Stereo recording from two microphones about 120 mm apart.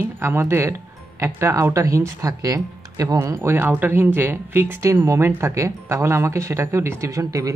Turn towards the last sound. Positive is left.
turn(degrees=-25)  # may be behind; listen again after turning